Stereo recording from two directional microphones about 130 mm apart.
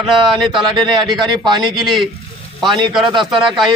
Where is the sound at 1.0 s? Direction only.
35° right (ahead or behind).